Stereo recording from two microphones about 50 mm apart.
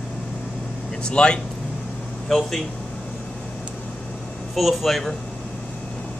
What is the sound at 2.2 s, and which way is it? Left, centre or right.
Speech, centre.